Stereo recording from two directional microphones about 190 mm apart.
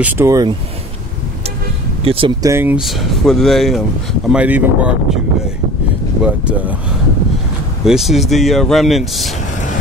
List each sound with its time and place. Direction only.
0.0 s speech: 15° right (ahead or behind)
2.0 s speech: 25° right (ahead or behind)
2.5 s speech: 10° right (ahead or behind)
7.8 s speech: centre (ahead or behind)